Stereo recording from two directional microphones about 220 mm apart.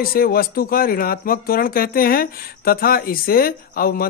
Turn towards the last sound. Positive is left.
turn(degrees=40)  # may be behind; listen again after turning